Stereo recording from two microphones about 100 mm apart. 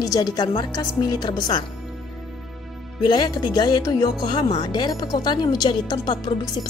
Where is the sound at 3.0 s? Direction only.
45° left (ahead or behind).